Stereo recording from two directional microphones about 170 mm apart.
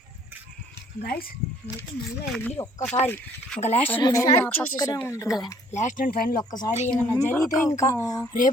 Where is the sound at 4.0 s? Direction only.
20° left (ahead or behind).